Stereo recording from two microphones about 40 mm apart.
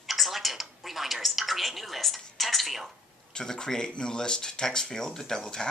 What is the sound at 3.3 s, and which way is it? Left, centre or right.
Speech, centre.